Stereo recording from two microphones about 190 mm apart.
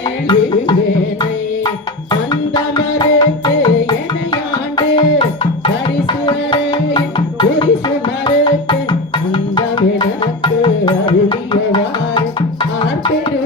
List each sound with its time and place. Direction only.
0.3 s music: 25° left (ahead or behind)
1.2 s tabla: 25° left (ahead or behind)
4.8 s music: 25° left (ahead or behind)